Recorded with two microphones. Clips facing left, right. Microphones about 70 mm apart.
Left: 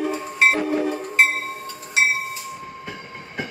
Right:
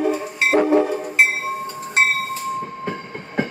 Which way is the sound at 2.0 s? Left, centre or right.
Right.